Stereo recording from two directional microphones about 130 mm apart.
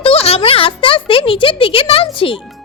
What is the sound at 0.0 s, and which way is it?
Speech, 45° left (ahead or behind).